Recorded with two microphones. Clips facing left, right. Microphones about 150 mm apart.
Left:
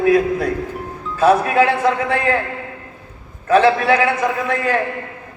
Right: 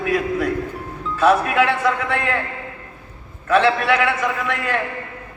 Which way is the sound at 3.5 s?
40° left (ahead or behind).